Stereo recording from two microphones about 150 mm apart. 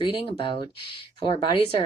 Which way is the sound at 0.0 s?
35° left (ahead or behind).